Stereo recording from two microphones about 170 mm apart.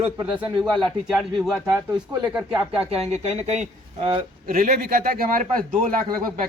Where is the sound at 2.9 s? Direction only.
40° right (ahead or behind).